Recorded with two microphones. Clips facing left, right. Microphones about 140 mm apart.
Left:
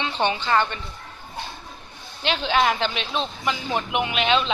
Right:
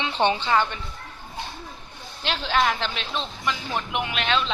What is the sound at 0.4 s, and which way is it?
Speech, 5° right (ahead or behind).